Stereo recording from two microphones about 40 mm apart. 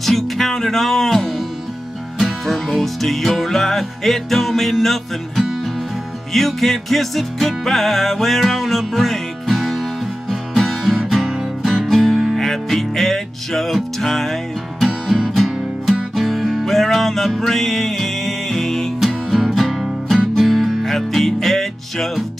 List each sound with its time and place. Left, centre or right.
0.0 s music: centre
12.4 s music: centre
15.0 s music: centre
18.9 s music: centre